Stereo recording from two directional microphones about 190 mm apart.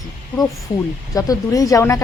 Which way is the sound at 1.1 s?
20° left (ahead or behind).